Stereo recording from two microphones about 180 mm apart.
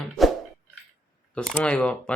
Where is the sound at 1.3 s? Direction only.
5° left (ahead or behind).